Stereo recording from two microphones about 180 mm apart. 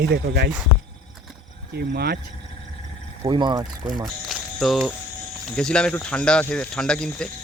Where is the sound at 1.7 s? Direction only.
60° right (ahead or behind).